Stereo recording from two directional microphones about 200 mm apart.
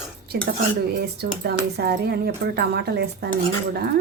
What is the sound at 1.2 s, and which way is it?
Speech, 55° right (ahead or behind).